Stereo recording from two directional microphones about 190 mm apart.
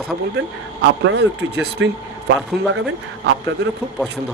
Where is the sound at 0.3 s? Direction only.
65° right (ahead or behind).